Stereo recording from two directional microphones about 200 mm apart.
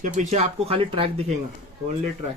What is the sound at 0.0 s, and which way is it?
Speech, 35° right (ahead or behind).